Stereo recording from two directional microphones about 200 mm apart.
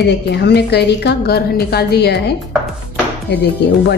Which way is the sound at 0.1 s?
55° left (ahead or behind).